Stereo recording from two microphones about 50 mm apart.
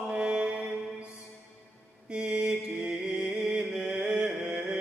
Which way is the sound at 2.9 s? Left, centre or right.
Centre.